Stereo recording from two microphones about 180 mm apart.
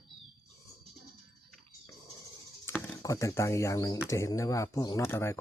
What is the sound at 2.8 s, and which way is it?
Speech, 15° left (ahead or behind).